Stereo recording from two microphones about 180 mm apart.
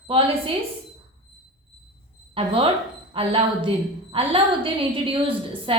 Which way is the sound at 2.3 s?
30° right (ahead or behind).